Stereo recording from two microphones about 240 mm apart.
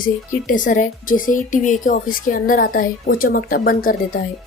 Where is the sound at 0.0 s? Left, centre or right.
Left.